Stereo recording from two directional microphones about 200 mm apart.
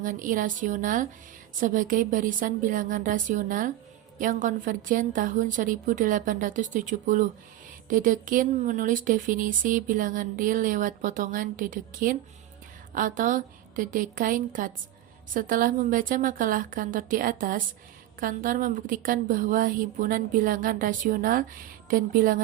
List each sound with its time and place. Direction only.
0.0 s a woman's voice: 40° right (ahead or behind)